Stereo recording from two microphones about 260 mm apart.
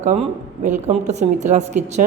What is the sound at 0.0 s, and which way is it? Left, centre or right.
Speech, right.